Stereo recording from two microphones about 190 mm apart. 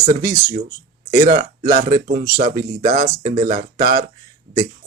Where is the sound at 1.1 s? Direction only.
50° right (ahead or behind).